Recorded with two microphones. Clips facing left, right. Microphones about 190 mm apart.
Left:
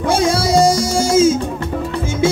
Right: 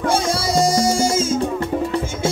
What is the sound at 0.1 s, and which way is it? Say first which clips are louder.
Music: left 7 dB; 70° left (ahead or behind).